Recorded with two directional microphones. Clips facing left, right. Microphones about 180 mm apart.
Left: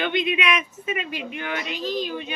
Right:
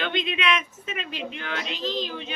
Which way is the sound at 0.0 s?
10° left (ahead or behind).